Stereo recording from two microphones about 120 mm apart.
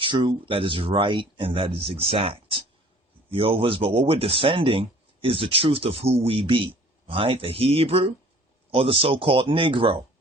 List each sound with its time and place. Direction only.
0.0 s speech: 40° right (ahead or behind)